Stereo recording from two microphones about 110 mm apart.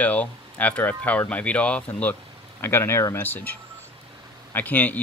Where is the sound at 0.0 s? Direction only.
15° left (ahead or behind).